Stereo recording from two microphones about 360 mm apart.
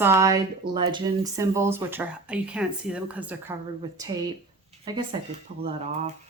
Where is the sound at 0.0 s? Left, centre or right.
Centre.